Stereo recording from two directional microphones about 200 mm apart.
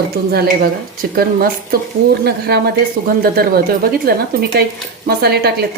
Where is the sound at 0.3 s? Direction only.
50° right (ahead or behind).